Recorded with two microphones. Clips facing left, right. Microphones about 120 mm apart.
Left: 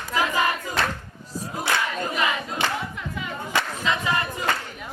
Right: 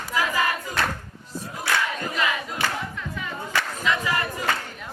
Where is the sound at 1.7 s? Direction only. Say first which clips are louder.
Even; 20° left (ahead or behind).